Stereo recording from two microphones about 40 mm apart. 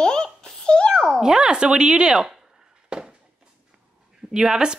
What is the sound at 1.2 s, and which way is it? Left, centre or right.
Speech, centre.